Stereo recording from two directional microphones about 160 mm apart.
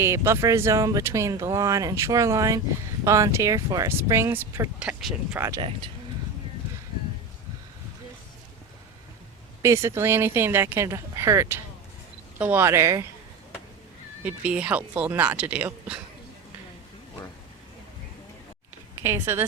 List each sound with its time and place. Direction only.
0.0 s speech: 15° right (ahead or behind)
5.5 s speech: 30° right (ahead or behind)
9.6 s speech: 15° right (ahead or behind)
14.3 s speech: 10° right (ahead or behind)
19.0 s speech: 15° right (ahead or behind)